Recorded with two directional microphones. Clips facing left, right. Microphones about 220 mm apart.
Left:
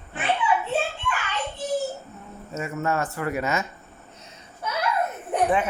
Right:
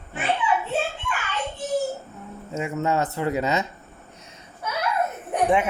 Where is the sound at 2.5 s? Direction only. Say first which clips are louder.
Right 2 dB; 20° right (ahead or behind).